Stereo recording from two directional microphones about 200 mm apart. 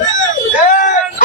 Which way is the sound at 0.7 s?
40° left (ahead or behind).